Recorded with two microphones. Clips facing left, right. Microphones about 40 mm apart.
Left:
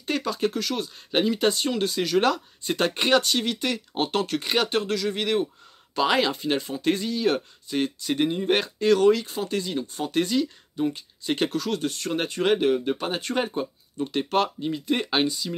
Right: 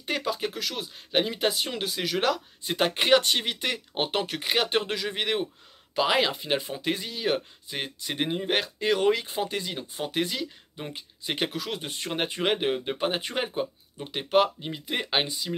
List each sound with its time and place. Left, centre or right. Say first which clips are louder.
0.0 s speech: left 3 dB; centre
3.2 s speech: left 2 dB; right
4.4 s speech: even; centre
4.6 s speech: left 2 dB; right
5.9 s speech: left 2 dB; centre
8.5 s speech: left 4 dB; centre
8.8 s speech: left 6 dB; centre